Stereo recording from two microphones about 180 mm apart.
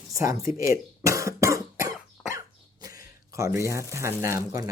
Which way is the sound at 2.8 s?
20° right (ahead or behind).